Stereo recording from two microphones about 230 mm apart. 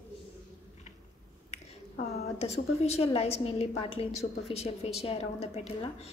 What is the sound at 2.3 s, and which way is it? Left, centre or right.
A woman's voice, left.